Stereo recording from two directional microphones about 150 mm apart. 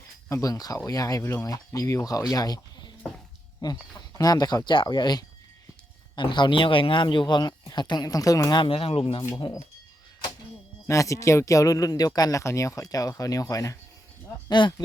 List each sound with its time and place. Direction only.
0.3 s speech: 20° left (ahead or behind); by 9.2 s 40° left (ahead or behind)
10.8 s speech: 20° left (ahead or behind)